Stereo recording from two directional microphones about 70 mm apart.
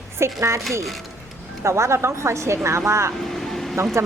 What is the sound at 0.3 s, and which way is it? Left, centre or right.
Speech, right.